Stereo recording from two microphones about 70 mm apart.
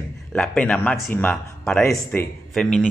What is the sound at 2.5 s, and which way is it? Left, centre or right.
Speech, centre.